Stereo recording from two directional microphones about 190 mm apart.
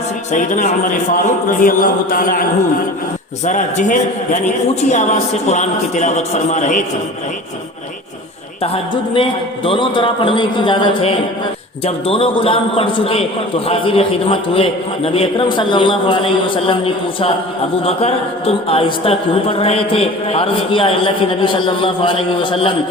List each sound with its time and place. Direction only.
0.3 s a man's voice: 40° left (ahead or behind)
3.4 s a man's voice: 40° left (ahead or behind)
8.6 s a woman's voice: 30° left (ahead or behind)